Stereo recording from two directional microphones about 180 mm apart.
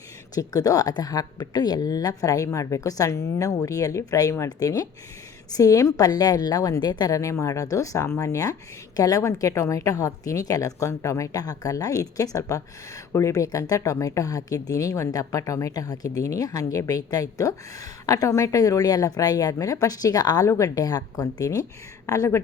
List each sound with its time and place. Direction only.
0.3 s speech: 20° left (ahead or behind)